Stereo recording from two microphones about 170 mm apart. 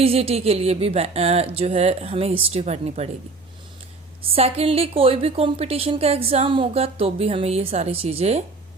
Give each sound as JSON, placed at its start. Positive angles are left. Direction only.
{"t": 0.0, "sound": "a woman's voice", "side_deg": -35}
{"t": 4.2, "sound": "a woman's voice", "side_deg": -35}